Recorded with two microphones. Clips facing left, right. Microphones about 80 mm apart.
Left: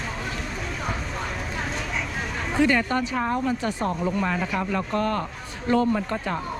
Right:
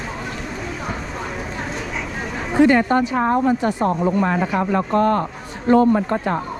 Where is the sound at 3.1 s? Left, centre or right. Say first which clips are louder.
Right 7 dB; right.